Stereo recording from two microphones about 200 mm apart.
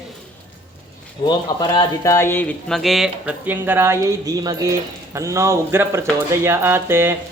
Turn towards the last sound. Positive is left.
turn(degrees=-10)  # may be behind; listen again after turning